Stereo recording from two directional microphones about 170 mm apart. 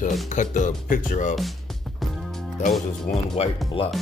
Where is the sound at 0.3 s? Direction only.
50° left (ahead or behind).